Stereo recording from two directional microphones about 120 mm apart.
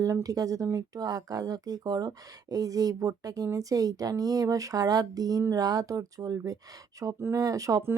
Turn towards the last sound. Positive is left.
turn(degrees=-30)  # may be behind; listen again after turning